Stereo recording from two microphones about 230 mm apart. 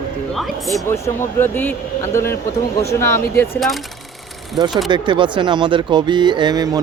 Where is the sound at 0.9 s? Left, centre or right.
Centre.